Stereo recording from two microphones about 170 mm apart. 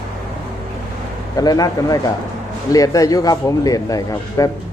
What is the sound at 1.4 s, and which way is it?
A man's voice, 20° left (ahead or behind).